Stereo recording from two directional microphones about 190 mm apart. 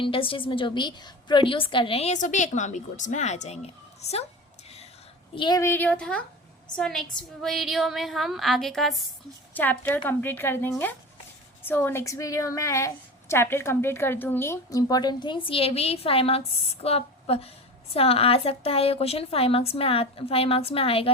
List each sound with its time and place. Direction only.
0.0 s a woman's voice: 30° left (ahead or behind)
5.3 s a woman's voice: 25° left (ahead or behind)